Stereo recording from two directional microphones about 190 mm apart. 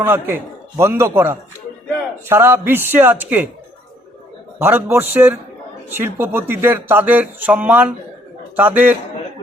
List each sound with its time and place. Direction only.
0.0 s speech: 10° right (ahead or behind)
4.6 s speech: 10° right (ahead or behind)